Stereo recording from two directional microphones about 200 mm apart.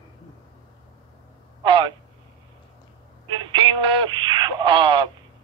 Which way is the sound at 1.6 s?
25° right (ahead or behind).